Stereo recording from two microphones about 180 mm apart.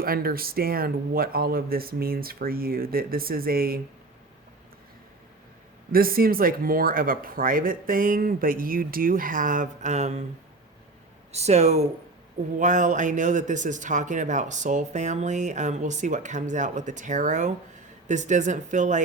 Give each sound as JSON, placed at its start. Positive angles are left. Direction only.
{"t": 0.0, "sound": "speech", "side_deg": -55}
{"t": 5.9, "sound": "speech", "side_deg": -55}
{"t": 11.3, "sound": "speech", "side_deg": -35}